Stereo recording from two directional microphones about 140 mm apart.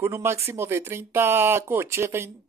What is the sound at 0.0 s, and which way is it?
Speech, 20° right (ahead or behind).